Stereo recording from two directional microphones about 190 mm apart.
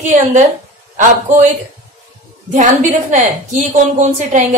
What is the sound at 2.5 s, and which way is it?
A woman's voice, 40° right (ahead or behind).